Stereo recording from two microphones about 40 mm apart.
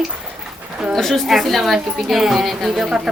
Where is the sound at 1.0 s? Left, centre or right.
Centre.